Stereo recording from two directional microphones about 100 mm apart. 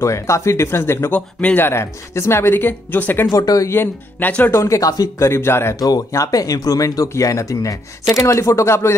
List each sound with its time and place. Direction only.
0.0 s speech: 30° left (ahead or behind)
3.3 s speech: 40° left (ahead or behind)
3.7 s speech: 20° left (ahead or behind)
4.6 s speech: 30° left (ahead or behind)
5.8 s speech: 40° left (ahead or behind)